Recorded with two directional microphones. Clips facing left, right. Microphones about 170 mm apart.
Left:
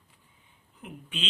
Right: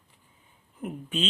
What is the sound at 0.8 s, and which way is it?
Speech, 45° right (ahead or behind).